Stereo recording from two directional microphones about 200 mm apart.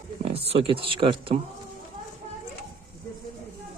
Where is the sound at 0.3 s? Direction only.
30° right (ahead or behind).